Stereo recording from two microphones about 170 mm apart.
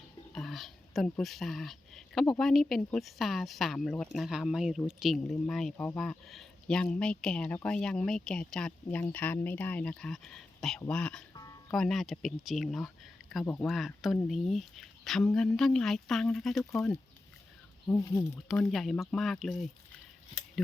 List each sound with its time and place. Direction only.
0.3 s a sound: centre (ahead or behind)
1.2 s speech: centre (ahead or behind)
17.8 s speech: 15° left (ahead or behind)
18.7 s speech: centre (ahead or behind)